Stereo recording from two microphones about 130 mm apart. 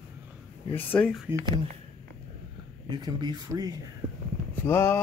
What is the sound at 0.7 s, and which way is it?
Speech, 10° left (ahead or behind).